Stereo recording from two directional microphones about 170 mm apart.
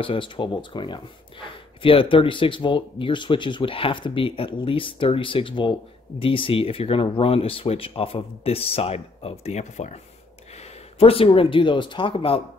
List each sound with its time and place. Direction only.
0.0 s speech: 30° left (ahead or behind)
11.0 s speech: 35° left (ahead or behind)